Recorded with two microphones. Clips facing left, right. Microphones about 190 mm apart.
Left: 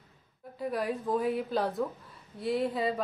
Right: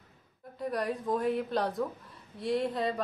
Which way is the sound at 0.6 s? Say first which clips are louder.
Left 1 dB; centre (ahead or behind).